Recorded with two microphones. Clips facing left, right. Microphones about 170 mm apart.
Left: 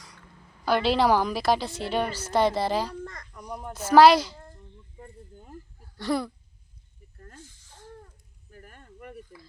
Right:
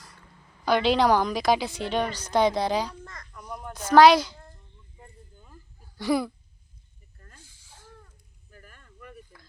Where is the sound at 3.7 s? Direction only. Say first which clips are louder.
Even; 5° left (ahead or behind).